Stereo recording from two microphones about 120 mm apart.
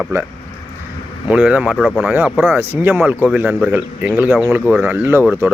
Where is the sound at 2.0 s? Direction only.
10° right (ahead or behind).